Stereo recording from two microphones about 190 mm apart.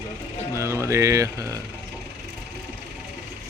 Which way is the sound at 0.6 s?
15° right (ahead or behind).